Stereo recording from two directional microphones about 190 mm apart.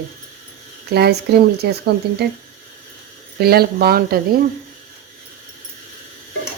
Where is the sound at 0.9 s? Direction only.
60° right (ahead or behind).